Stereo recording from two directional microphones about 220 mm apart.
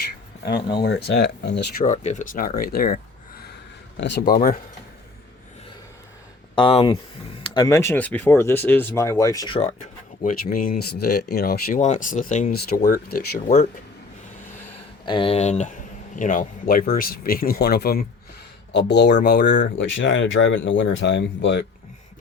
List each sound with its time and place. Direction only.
0.8 s speech: 50° left (ahead or behind)
1.8 s speech: 35° left (ahead or behind)
3.9 s speech: 50° left (ahead or behind)
4.4 s speech: 40° left (ahead or behind)
6.6 s speech: 25° left (ahead or behind)
9.8 s speech: 40° left (ahead or behind)
15.0 s speech: 20° left (ahead or behind); by 21.6 s 55° left (ahead or behind)